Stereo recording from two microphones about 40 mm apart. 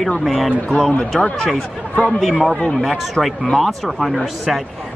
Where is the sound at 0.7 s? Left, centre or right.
Centre.